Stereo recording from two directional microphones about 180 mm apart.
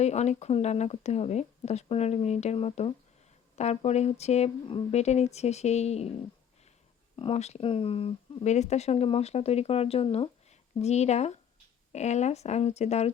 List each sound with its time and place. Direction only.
0.0 s speech: 40° left (ahead or behind)
7.2 s speech: 35° left (ahead or behind)